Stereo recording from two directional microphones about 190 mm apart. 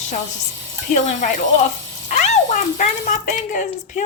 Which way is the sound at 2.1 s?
35° left (ahead or behind).